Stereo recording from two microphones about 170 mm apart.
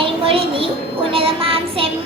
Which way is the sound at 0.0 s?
30° right (ahead or behind).